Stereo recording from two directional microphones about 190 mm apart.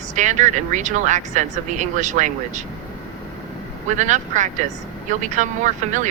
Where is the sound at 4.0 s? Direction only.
40° right (ahead or behind).